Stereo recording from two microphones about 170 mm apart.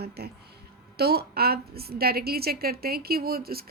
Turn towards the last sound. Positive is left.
turn(degrees=-65)  # may be behind; listen again after turning